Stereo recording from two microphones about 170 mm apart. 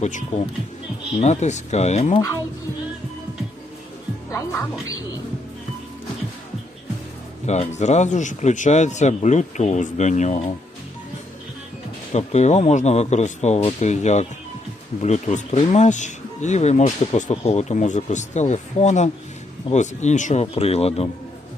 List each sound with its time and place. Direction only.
0.0 s speech: 45° left (ahead or behind)
4.3 s a woman's voice: 15° left (ahead or behind)
7.4 s speech: 40° left (ahead or behind)
12.1 s speech: 40° left (ahead or behind)